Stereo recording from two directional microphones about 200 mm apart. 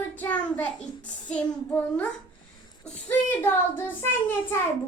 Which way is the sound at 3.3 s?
10° left (ahead or behind).